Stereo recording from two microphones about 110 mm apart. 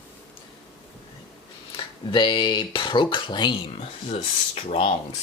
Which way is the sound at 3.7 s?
65° left (ahead or behind).